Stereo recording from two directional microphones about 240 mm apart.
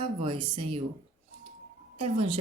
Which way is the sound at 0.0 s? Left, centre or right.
Right.